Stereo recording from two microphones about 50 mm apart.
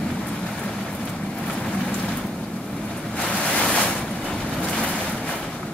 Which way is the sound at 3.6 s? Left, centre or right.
Left.